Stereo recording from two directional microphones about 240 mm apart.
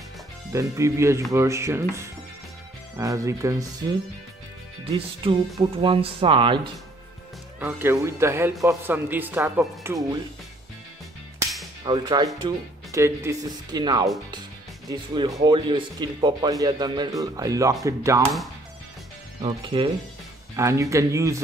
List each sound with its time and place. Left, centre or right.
0.5 s speech: centre
4.9 s speech: right
11.8 s speech: centre
19.4 s speech: centre